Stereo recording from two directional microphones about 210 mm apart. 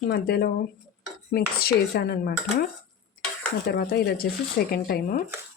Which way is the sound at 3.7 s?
50° left (ahead or behind).